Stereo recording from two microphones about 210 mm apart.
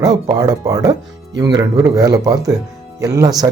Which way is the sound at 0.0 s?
20° right (ahead or behind).